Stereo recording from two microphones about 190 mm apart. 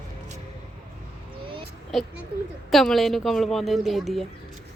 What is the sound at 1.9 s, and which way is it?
A woman's voice, centre (ahead or behind).